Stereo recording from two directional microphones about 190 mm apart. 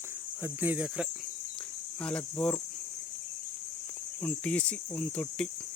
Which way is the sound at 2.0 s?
5° left (ahead or behind).